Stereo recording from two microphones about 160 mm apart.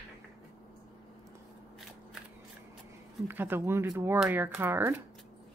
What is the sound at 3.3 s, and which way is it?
Speech, 15° right (ahead or behind).